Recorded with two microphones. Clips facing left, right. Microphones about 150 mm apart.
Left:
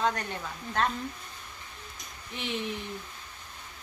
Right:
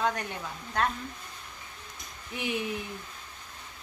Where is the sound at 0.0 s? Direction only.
10° right (ahead or behind).